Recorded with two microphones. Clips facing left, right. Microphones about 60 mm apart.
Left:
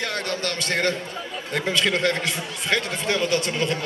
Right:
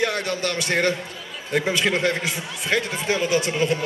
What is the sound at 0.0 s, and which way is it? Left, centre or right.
A man's voice, centre.